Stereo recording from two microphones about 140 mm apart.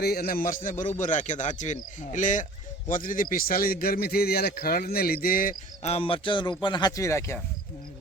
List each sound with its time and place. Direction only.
0.2 s speech: 90° left; by 2.5 s 65° left (ahead or behind)
2.9 s a man's voice: 75° left (ahead or behind)
5.8 s speech: 45° left (ahead or behind); by 7.3 s 20° left (ahead or behind)